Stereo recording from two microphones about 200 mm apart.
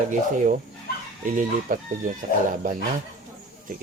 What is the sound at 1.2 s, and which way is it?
Chicken, 40° right (ahead or behind).